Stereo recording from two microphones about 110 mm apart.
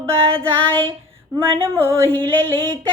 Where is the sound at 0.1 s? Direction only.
55° right (ahead or behind).